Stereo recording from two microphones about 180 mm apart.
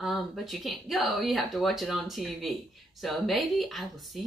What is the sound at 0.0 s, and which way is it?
Speech, centre (ahead or behind).